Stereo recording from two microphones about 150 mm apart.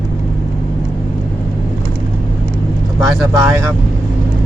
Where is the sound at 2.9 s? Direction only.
20° right (ahead or behind).